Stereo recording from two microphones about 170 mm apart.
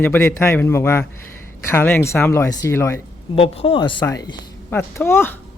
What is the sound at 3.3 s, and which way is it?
Speech, 35° left (ahead or behind).